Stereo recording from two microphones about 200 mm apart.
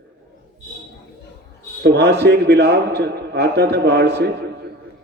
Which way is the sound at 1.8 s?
60° right (ahead or behind).